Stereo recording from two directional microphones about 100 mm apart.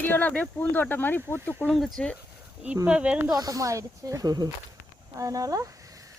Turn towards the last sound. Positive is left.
turn(degrees=-35)  # may be behind; listen again after turning